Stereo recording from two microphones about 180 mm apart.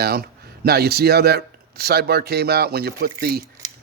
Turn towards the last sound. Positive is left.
turn(degrees=-60)  # may be behind; listen again after turning